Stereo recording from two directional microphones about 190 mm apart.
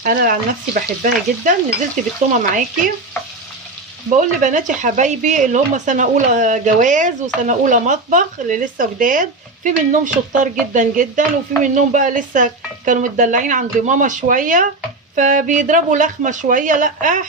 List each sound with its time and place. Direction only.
0.0 s speech: 50° right (ahead or behind)
4.2 s speech: 40° right (ahead or behind)